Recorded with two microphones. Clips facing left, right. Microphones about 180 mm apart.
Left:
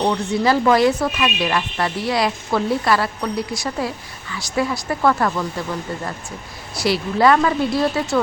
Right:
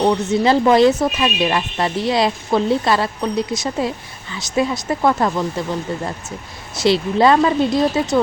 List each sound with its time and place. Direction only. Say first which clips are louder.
0.0 s speech: right 3 dB; 20° right (ahead or behind)